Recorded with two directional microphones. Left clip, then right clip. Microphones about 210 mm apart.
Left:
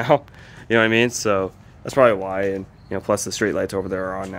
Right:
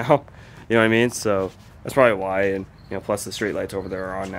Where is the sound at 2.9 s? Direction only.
25° left (ahead or behind).